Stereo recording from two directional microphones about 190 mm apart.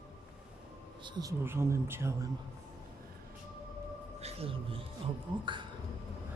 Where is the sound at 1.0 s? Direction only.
20° right (ahead or behind).